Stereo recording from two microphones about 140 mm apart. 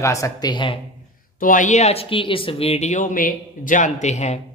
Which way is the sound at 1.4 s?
70° left (ahead or behind).